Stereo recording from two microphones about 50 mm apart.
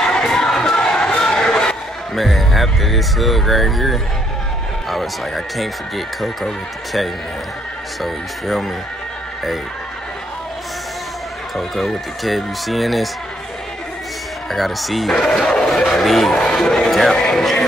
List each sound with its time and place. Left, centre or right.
0.0 s music: centre
2.1 s speech: centre
11.5 s speech: centre
14.5 s speech: centre
15.2 s music: centre
15.9 s speech: centre